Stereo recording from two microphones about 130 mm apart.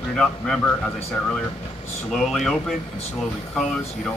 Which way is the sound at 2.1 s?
Centre (ahead or behind).